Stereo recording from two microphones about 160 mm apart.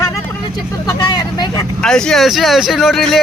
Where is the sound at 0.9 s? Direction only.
25° left (ahead or behind).